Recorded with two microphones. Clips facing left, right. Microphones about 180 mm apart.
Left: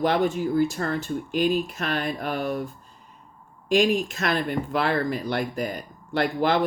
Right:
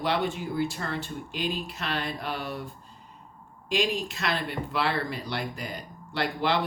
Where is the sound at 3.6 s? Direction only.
50° left (ahead or behind).